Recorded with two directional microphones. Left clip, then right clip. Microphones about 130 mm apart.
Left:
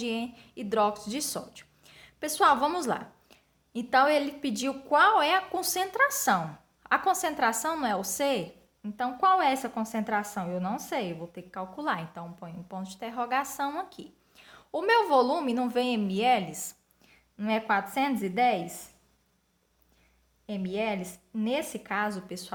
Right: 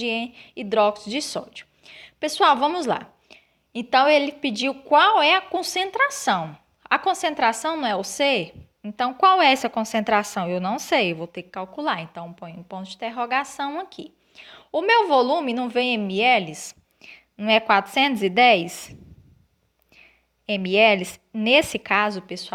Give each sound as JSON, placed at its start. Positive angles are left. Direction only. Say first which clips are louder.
{"t": 0.0, "sound": "a woman's voice", "louder": "right 7 dB", "side_deg": -25}
{"t": 20.5, "sound": "a woman's voice", "louder": "right 14 dB", "side_deg": -45}